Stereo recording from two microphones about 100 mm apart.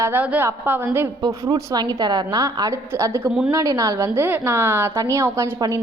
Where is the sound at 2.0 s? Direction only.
45° right (ahead or behind); by 5.6 s 25° right (ahead or behind).